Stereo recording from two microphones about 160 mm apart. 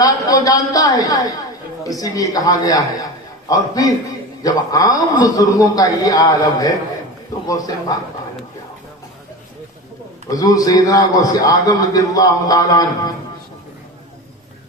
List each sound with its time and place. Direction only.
0.0 s a man's voice: 20° left (ahead or behind)
10.2 s a man's voice: 20° left (ahead or behind)